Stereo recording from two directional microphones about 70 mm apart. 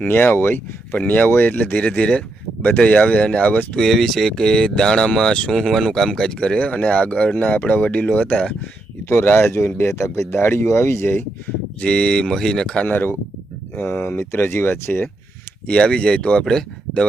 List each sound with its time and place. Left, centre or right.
0.1 s speech: left
0.9 s speech: left
3.8 s speech: centre; by 8.5 s left
9.0 s speech: left
11.8 s speech: centre
12.9 s speech: left
15.6 s speech: centre